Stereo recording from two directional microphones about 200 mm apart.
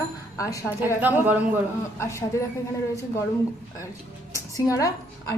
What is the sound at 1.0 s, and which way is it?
Speech, 10° right (ahead or behind).